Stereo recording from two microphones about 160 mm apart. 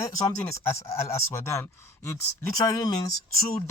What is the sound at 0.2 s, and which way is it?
Speech, 20° left (ahead or behind).